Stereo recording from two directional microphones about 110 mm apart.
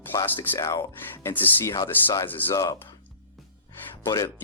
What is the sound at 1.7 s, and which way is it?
Speech, 30° left (ahead or behind).